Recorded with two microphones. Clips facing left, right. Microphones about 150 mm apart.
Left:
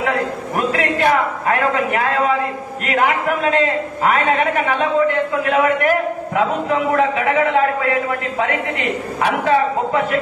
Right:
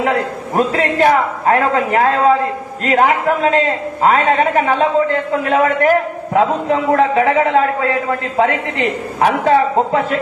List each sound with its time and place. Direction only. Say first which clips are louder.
0.6 s a man's voice: right 4 dB; 30° right (ahead or behind)